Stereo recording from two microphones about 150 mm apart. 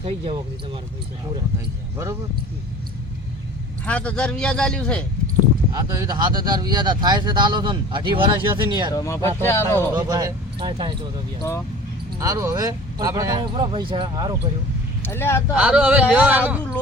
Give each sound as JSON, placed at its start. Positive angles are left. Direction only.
{"t": 1.5, "sound": "speech", "side_deg": -20}
{"t": 3.8, "sound": "a man's voice", "side_deg": 10}
{"t": 5.7, "sound": "speech", "side_deg": -25}
{"t": 9.0, "sound": "speech", "side_deg": 20}
{"t": 10.1, "sound": "speech", "side_deg": -25}
{"t": 12.2, "sound": "speech", "side_deg": -20}
{"t": 15.0, "sound": "speech", "side_deg": 15}
{"t": 15.5, "sound": "speech", "side_deg": -5}